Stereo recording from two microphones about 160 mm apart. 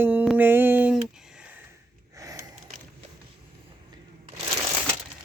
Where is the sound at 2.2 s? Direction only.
20° right (ahead or behind).